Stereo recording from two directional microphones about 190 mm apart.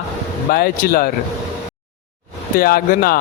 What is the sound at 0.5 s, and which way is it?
Speech, 50° left (ahead or behind).